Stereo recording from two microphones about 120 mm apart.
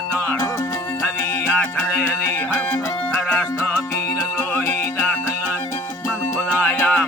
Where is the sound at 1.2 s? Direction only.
25° left (ahead or behind).